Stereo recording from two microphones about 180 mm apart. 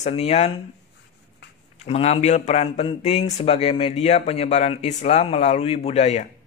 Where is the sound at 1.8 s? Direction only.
35° left (ahead or behind).